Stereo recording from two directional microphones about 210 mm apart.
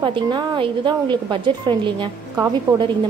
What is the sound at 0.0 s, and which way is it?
A woman's voice, 25° right (ahead or behind).